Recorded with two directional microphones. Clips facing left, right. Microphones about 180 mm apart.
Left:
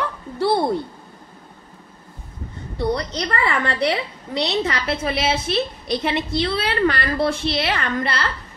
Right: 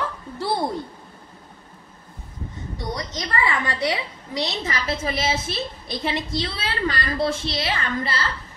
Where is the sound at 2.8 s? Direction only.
65° left (ahead or behind).